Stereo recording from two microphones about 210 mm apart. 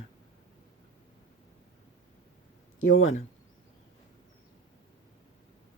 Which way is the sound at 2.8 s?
70° left (ahead or behind).